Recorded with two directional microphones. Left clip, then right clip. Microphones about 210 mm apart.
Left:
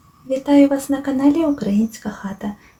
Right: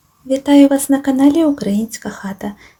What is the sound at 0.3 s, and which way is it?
Speech, 35° right (ahead or behind).